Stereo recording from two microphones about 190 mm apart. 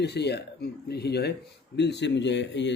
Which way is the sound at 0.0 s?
60° left (ahead or behind).